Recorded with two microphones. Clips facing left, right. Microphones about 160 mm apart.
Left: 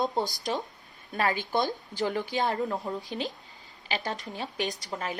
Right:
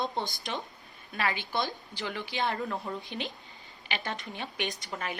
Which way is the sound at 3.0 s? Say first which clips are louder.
Left 4 dB; 40° left (ahead or behind).